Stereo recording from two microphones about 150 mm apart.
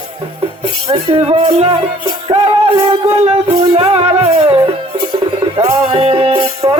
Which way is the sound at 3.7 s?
40° right (ahead or behind).